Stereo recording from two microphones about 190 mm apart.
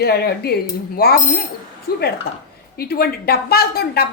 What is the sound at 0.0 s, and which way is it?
A woman's voice, 55° left (ahead or behind).